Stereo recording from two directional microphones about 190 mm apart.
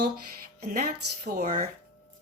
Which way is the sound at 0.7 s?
45° right (ahead or behind).